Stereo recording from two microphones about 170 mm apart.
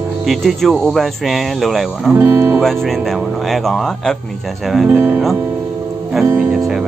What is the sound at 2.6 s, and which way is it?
Speech, centre (ahead or behind).